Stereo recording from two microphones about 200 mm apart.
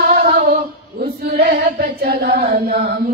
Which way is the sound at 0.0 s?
50° right (ahead or behind).